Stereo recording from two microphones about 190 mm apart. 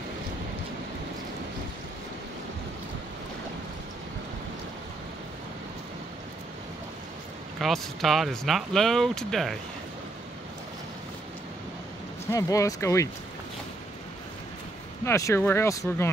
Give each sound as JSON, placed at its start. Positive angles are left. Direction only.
{"t": 7.6, "sound": "speech", "side_deg": 0}
{"t": 12.3, "sound": "speech", "side_deg": 15}
{"t": 15.0, "sound": "speech", "side_deg": 15}